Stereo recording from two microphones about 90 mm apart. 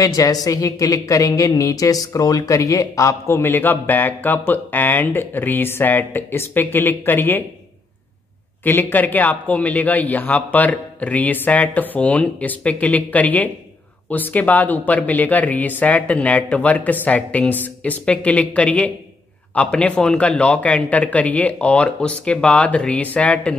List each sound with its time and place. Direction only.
0.0 s a woman's voice: 40° left (ahead or behind); by 7.4 s 20° left (ahead or behind)
8.6 s a man's voice: 20° left (ahead or behind)